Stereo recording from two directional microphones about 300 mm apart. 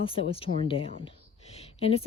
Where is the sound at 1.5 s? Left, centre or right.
Centre.